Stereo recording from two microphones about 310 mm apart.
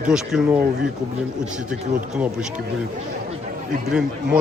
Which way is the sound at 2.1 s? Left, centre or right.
Centre.